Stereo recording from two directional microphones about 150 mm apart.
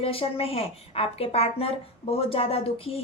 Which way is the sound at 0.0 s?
40° left (ahead or behind).